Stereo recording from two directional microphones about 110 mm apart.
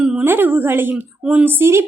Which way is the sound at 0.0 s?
5° right (ahead or behind).